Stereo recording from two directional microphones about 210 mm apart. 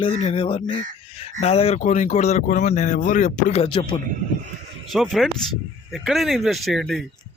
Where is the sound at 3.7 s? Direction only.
20° left (ahead or behind).